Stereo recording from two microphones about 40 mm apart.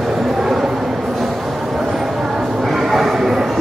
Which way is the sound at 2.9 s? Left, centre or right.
Centre.